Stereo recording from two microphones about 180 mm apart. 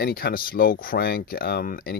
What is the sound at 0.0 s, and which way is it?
Speech, 55° left (ahead or behind).